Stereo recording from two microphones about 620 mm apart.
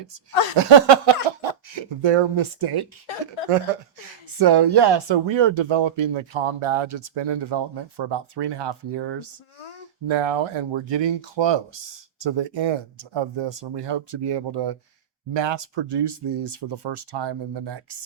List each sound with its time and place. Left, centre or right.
0.5 s speech: right
4.4 s speech: right